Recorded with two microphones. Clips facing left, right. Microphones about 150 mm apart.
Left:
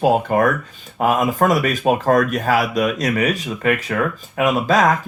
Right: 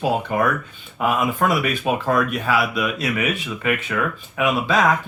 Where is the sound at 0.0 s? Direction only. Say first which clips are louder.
Left 5 dB; 45° left (ahead or behind).